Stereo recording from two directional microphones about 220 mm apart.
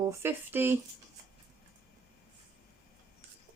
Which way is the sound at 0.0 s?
10° right (ahead or behind).